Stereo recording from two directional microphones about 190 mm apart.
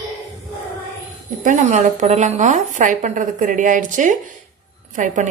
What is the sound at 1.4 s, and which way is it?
A woman's voice, 40° right (ahead or behind).